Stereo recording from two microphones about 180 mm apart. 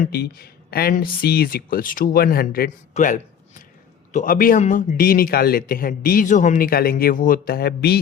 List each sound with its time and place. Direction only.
0.0 s a man's voice: 55° left (ahead or behind)